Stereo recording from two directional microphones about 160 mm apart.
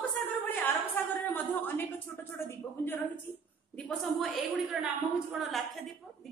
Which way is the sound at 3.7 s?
5° left (ahead or behind).